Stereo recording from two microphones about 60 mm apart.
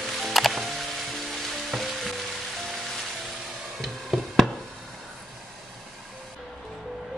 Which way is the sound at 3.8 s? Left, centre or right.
Centre.